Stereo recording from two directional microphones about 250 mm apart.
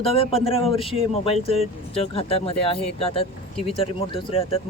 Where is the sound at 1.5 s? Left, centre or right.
Left.